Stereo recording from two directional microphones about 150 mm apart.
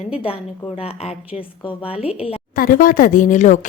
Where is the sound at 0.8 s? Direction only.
40° left (ahead or behind).